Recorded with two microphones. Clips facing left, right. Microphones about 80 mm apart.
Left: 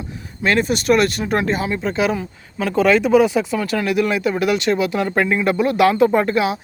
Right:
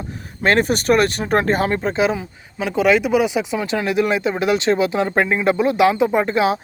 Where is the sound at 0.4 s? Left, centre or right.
Right.